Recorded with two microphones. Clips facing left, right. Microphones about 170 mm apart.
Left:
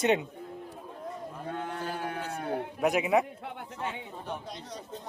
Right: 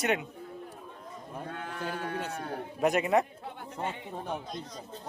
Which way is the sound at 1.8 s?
70° right (ahead or behind).